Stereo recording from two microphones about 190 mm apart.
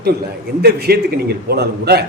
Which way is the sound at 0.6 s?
55° right (ahead or behind).